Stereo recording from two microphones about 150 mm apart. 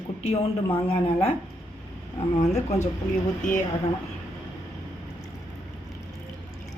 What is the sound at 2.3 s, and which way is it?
Speech, 50° left (ahead or behind).